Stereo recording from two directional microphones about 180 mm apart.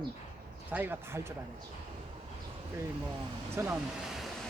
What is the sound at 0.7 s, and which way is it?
Speech, 10° right (ahead or behind).